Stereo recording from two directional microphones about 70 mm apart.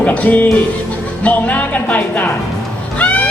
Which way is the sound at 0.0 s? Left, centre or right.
Centre.